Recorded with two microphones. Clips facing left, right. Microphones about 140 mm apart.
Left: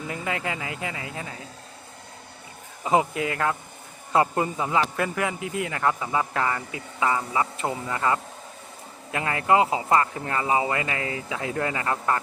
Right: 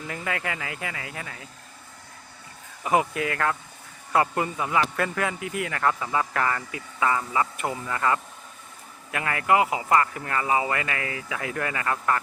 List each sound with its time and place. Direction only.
0.1 s a man's voice: 20° left (ahead or behind)
2.8 s a man's voice: 25° left (ahead or behind)